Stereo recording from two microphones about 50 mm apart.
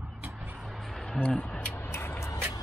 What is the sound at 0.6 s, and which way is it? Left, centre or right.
Music, centre.